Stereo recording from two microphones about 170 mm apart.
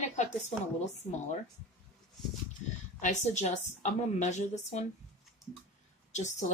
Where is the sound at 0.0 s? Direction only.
40° left (ahead or behind).